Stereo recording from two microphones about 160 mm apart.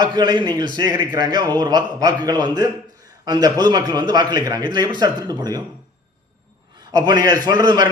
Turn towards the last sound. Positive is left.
turn(degrees=-25)  # may be behind; listen again after turning